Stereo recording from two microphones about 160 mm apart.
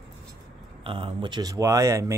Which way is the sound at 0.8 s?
35° right (ahead or behind).